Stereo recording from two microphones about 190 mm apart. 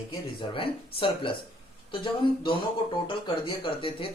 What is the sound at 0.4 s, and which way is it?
Speech, 25° left (ahead or behind).